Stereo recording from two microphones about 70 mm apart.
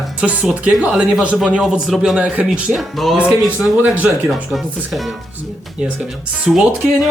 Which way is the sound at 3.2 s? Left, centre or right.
Centre.